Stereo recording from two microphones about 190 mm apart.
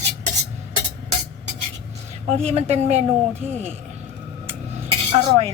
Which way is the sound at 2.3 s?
35° right (ahead or behind).